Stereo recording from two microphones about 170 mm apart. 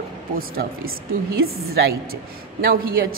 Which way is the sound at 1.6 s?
65° right (ahead or behind).